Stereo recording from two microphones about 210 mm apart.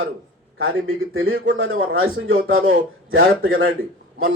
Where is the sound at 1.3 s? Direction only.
60° right (ahead or behind).